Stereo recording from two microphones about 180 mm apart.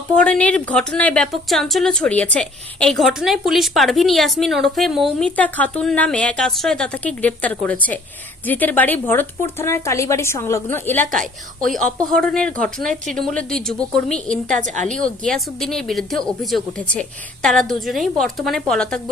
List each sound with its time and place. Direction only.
0.1 s a woman's voice: 5° left (ahead or behind)
14.6 s a woman's voice: 40° right (ahead or behind)
15.2 s a woman's voice: 5° left (ahead or behind)